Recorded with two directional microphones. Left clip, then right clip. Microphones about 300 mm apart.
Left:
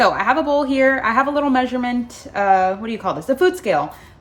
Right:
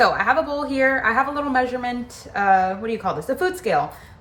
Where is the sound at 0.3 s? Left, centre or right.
Left.